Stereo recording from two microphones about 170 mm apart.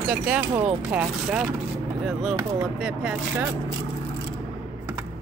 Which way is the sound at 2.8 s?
5° right (ahead or behind).